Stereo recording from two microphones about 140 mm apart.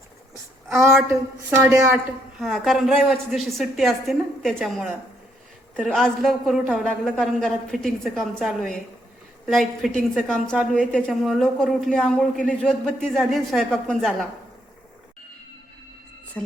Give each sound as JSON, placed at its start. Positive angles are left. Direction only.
{"t": 1.1, "sound": "a woman's voice", "side_deg": -20}
{"t": 2.4, "sound": "a man's voice", "side_deg": 0}